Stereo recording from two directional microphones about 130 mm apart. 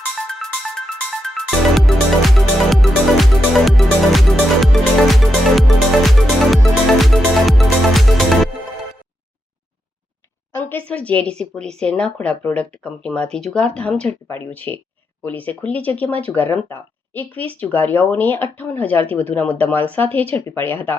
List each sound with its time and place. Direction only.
0.3 s music: centre (ahead or behind)
10.5 s speech: 15° left (ahead or behind)